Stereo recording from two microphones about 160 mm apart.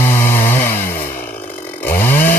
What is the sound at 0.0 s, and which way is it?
Chainsaw, 15° left (ahead or behind).